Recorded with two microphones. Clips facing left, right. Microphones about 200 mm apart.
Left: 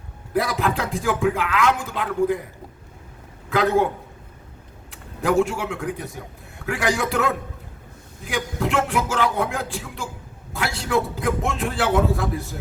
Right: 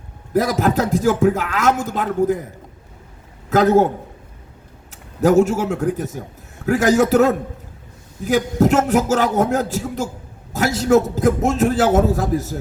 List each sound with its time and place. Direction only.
0.3 s speech: 40° right (ahead or behind)
3.5 s a man's voice: 40° right (ahead or behind)